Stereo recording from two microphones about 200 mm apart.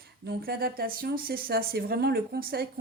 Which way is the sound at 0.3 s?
50° right (ahead or behind).